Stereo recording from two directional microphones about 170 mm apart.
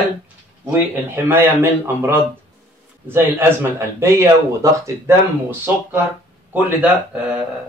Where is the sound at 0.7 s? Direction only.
10° right (ahead or behind).